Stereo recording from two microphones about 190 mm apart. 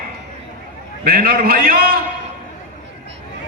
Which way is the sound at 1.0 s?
50° right (ahead or behind).